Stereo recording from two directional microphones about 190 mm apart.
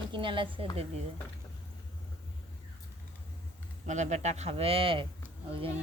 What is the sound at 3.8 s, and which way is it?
Speech, 40° right (ahead or behind).